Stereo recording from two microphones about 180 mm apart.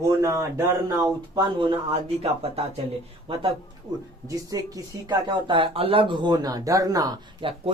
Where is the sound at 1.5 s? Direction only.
30° right (ahead or behind).